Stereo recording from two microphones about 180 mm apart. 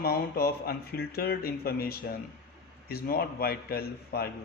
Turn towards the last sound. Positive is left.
turn(degrees=60)  # may be behind; listen again after turning